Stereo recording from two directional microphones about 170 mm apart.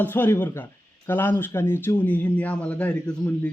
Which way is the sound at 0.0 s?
10° left (ahead or behind).